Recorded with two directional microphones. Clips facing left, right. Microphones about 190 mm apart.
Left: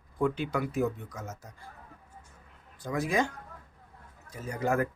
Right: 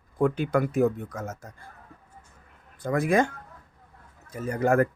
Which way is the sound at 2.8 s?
55° right (ahead or behind).